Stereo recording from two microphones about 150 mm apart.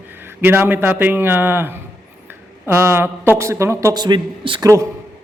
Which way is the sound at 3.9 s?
30° right (ahead or behind).